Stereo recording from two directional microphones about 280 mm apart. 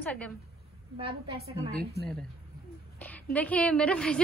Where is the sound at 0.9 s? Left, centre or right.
Centre.